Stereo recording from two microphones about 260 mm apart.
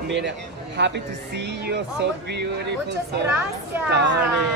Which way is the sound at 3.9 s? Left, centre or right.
Right.